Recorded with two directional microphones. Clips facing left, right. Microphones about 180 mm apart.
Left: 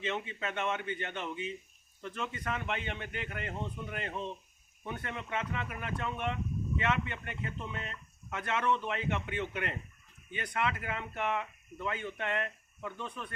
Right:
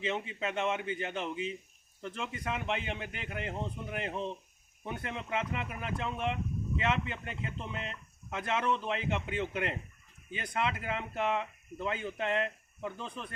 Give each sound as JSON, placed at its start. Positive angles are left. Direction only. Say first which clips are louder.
{"t": 0.0, "sound": "speech", "louder": "right 2 dB", "side_deg": -15}
{"t": 2.4, "sound": "speech", "louder": "right 3 dB", "side_deg": -15}